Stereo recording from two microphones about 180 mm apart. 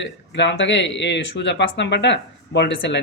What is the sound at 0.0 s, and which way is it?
Speech, 75° left (ahead or behind).